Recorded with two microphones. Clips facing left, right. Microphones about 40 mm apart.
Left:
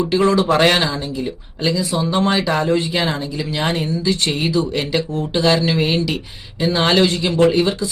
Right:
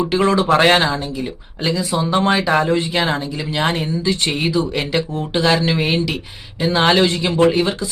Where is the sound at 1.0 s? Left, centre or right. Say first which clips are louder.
Left 1 dB; centre; by 2.8 s right.